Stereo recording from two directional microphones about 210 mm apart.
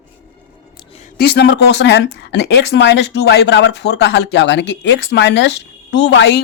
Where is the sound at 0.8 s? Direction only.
30° left (ahead or behind).